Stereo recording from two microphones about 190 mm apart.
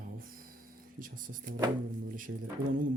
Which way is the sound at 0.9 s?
45° right (ahead or behind).